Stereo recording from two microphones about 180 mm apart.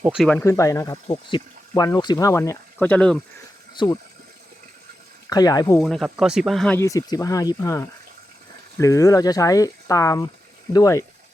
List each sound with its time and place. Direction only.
0.0 s speech: 5° right (ahead or behind)
0.3 s speech: 15° left (ahead or behind)
1.0 s speech: 30° left (ahead or behind); by 3.2 s 5° left (ahead or behind)
3.8 s speech: 25° left (ahead or behind)
5.3 s speech: 20° left (ahead or behind)
5.8 s speech: centre (ahead or behind)
6.7 s speech: 20° left (ahead or behind)